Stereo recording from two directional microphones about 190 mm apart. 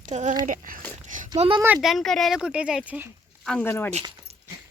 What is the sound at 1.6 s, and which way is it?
Speech, 15° right (ahead or behind).